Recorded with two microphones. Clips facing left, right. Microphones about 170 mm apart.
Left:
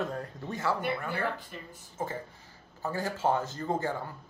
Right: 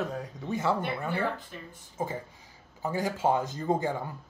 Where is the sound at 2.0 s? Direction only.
15° right (ahead or behind).